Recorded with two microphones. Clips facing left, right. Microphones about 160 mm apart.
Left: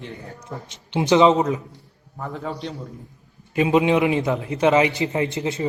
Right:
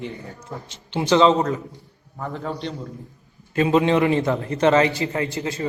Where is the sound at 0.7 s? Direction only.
20° left (ahead or behind).